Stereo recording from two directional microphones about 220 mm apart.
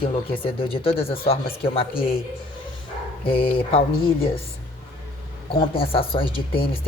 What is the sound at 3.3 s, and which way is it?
Speech, 25° left (ahead or behind).